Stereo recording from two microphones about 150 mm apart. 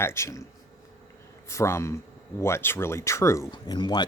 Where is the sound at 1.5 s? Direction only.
20° left (ahead or behind).